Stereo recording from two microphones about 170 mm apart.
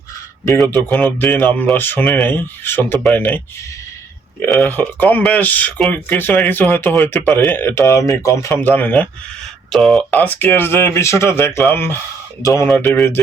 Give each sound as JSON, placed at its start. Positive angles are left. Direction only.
{"t": 0.7, "sound": "speech", "side_deg": 10}
{"t": 4.4, "sound": "speech", "side_deg": 5}
{"t": 10.1, "sound": "speech", "side_deg": 10}